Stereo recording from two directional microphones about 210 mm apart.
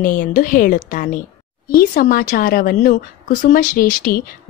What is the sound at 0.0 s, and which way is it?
A woman's voice, 40° left (ahead or behind).